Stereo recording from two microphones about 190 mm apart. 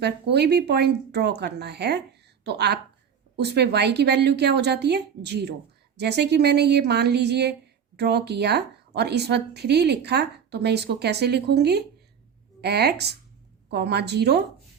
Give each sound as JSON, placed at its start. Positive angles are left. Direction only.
{"t": 0.0, "sound": "speech", "side_deg": -60}